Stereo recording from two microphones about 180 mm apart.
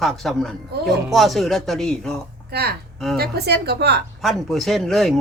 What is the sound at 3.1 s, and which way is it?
Speech, 60° right (ahead or behind).